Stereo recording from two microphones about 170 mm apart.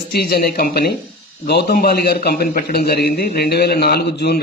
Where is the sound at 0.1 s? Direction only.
65° left (ahead or behind).